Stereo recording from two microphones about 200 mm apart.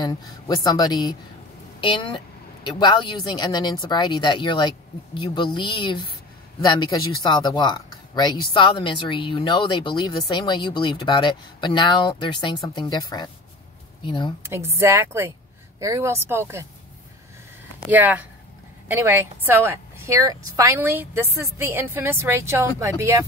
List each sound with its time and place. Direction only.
0.7 s a woman's voice: 20° left (ahead or behind)
14.5 s a woman's voice: 15° right (ahead or behind)
17.8 s a woman's voice: 10° right (ahead or behind)